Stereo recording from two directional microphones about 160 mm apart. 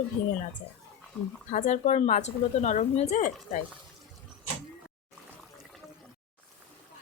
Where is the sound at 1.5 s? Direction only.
50° left (ahead or behind).